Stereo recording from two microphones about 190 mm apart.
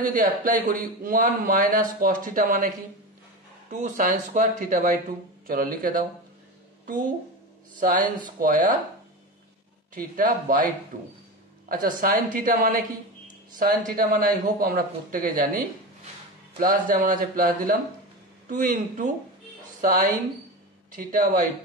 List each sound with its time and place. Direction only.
0.0 s speech: 45° right (ahead or behind)
3.7 s speech: 40° right (ahead or behind)
7.8 s speech: 45° right (ahead or behind)
9.9 s speech: 45° right (ahead or behind)